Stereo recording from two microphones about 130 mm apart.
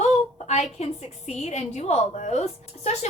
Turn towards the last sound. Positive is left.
turn(degrees=60)  # may be behind; listen again after turning